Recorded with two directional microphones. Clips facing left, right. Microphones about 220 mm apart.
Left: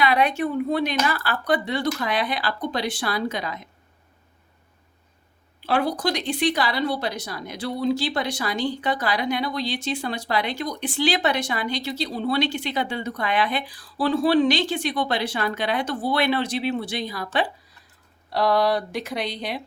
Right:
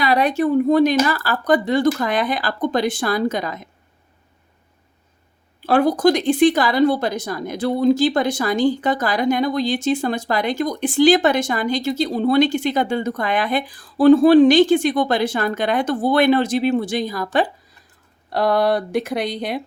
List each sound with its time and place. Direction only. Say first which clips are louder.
0.0 s a woman's voice: right 4 dB; 40° right (ahead or behind)
5.6 s a woman's voice: right 8 dB; 50° right (ahead or behind)
18.3 s a woman's voice: right 3 dB; 50° right (ahead or behind)